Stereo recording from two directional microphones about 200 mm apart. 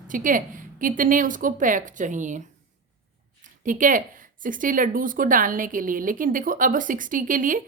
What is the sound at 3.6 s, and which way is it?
Speech, 40° right (ahead or behind).